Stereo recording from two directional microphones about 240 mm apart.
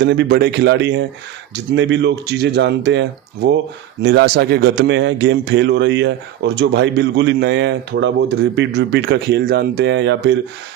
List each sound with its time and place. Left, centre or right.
0.0 s speech: right